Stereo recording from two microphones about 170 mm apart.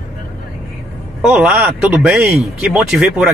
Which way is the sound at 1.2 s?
5° right (ahead or behind).